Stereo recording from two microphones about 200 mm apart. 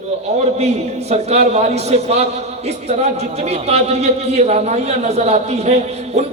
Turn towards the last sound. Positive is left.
turn(degrees=-35)  # may be behind; listen again after turning